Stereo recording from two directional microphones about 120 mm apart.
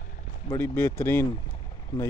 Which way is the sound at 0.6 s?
20° left (ahead or behind).